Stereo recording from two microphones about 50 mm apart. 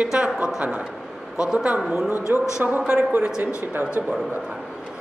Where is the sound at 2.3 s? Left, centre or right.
Right.